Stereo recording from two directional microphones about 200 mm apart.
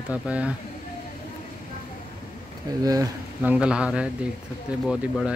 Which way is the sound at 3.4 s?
5° right (ahead or behind).